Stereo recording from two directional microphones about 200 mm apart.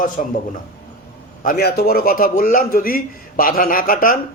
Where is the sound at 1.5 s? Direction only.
50° left (ahead or behind).